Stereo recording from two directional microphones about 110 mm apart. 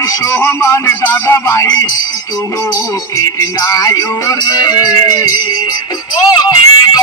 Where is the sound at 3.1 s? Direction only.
30° left (ahead or behind).